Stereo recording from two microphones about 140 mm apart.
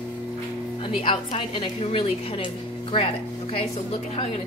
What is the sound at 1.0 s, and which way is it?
A woman's voice, 40° left (ahead or behind).